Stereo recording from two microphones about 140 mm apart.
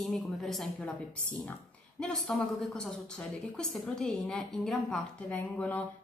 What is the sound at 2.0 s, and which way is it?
A woman's voice, 5° left (ahead or behind).